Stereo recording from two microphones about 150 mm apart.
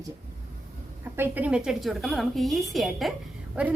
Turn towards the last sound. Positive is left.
turn(degrees=-10)  # may be behind; listen again after turning